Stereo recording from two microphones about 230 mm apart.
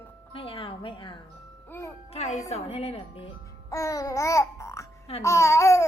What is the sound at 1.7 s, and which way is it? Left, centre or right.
Music, centre.